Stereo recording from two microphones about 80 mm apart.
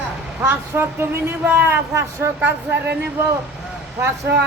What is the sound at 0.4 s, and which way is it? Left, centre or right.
A woman's voice, right.